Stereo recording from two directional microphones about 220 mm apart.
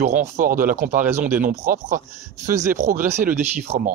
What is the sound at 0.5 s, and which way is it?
Speech, 40° right (ahead or behind).